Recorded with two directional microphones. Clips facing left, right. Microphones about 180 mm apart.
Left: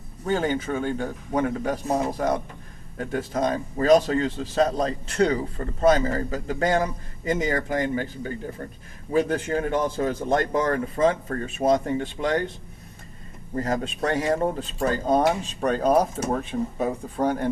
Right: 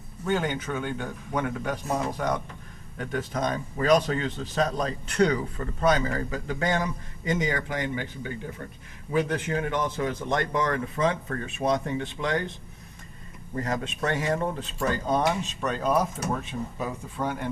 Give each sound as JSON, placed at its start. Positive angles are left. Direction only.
{"t": 0.3, "sound": "speech", "side_deg": 40}
{"t": 13.6, "sound": "speech", "side_deg": 35}